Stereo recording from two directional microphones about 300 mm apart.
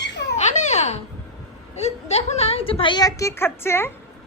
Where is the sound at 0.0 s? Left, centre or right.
Left.